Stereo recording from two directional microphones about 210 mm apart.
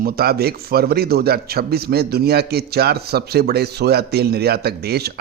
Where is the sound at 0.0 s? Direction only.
45° right (ahead or behind).